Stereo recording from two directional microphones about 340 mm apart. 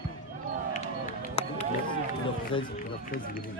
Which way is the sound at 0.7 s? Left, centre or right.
Centre.